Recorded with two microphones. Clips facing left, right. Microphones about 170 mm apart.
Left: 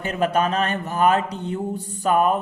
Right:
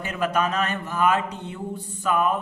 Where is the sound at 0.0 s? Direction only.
35° left (ahead or behind).